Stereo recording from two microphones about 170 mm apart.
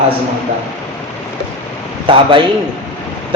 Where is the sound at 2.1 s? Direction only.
30° right (ahead or behind).